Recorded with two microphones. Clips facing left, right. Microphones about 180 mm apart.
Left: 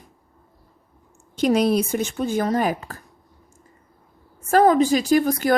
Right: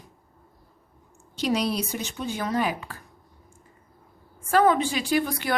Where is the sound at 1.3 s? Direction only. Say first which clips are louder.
Left 7 dB; 50° left (ahead or behind).